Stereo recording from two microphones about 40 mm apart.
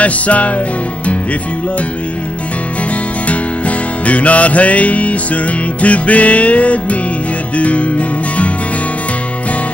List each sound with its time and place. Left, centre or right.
0.0 s music: left
4.0 s music: left